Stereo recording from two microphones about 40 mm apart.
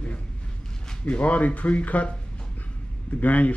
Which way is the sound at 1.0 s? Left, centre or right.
Left.